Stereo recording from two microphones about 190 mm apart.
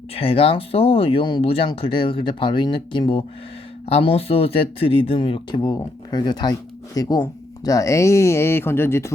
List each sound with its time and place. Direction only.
0.1 s speech: 30° left (ahead or behind); by 9.1 s 15° left (ahead or behind)